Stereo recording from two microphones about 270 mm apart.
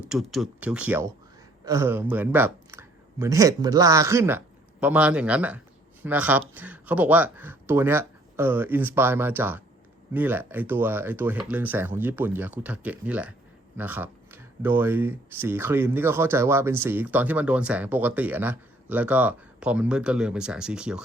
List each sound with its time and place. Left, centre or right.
0.1 s speech: centre